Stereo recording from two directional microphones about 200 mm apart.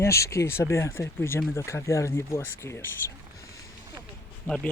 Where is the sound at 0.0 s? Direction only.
15° left (ahead or behind).